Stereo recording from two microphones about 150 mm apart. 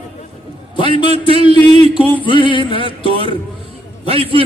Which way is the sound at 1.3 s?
40° right (ahead or behind).